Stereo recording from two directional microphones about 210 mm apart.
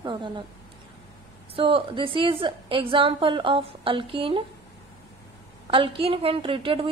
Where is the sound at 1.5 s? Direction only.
25° right (ahead or behind).